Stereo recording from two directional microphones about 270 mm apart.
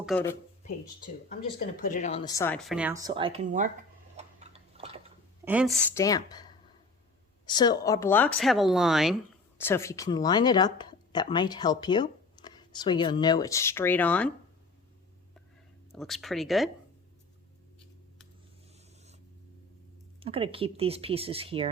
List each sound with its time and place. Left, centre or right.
0.0 s speech: centre
0.6 s speech: left; by 3.7 s right
4.2 s a sound: right
5.5 s speech: centre
5.9 s speech: centre
9.6 s speech: centre
15.9 s speech: centre
20.1 s speech: centre